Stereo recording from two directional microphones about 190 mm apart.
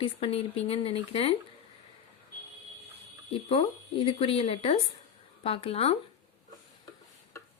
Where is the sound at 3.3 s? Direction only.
30° left (ahead or behind).